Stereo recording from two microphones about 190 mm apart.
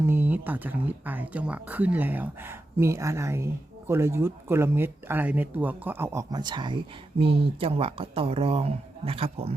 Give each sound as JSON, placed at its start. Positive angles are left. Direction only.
{"t": 0.0, "sound": "speech", "side_deg": -10}